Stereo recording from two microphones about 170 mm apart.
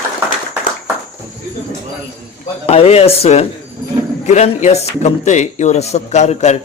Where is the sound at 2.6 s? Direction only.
35° left (ahead or behind).